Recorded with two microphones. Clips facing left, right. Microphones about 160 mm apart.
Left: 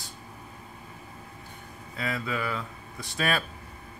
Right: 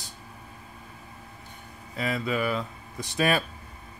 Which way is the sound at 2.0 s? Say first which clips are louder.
Right 4 dB; 20° right (ahead or behind).